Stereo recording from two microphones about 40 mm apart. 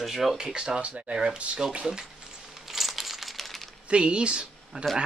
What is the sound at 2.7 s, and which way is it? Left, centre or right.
Crumpling, centre.